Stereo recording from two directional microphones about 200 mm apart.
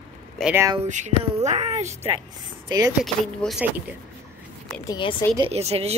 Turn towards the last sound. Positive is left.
turn(degrees=-30)  # may be behind; listen again after turning